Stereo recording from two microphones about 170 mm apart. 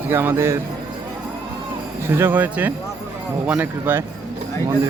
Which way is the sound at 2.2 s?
10° right (ahead or behind).